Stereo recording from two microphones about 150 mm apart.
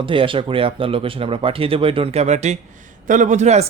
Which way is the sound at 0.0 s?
35° right (ahead or behind).